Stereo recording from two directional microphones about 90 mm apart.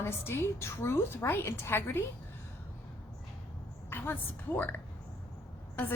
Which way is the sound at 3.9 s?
25° left (ahead or behind).